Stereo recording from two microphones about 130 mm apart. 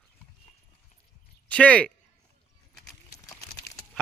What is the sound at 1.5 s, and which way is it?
Speech, 10° left (ahead or behind).